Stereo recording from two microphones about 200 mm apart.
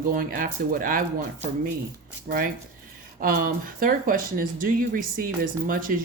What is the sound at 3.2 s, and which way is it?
A woman's voice, 45° right (ahead or behind).